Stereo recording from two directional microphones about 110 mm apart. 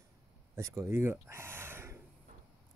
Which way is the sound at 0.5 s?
25° right (ahead or behind).